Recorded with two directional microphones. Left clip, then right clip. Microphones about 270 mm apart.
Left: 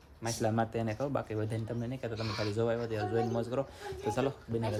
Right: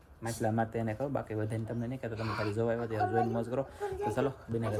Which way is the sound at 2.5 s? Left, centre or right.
Centre.